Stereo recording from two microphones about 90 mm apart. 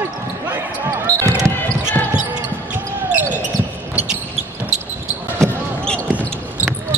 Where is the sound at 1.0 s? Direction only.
35° right (ahead or behind).